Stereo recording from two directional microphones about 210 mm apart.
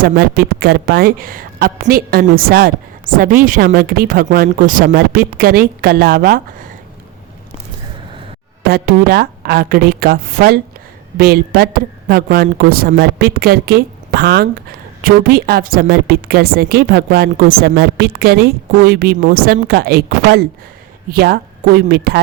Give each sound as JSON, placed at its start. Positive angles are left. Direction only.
{"t": 0.0, "sound": "a woman's voice", "side_deg": -45}
{"t": 8.6, "sound": "a woman's voice", "side_deg": -45}